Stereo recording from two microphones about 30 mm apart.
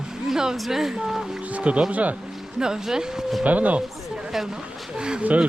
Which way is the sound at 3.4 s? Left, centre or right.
Right.